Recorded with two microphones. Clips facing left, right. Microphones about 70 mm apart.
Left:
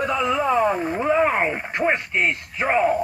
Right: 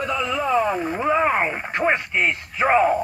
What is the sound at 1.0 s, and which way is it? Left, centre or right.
Speech, right.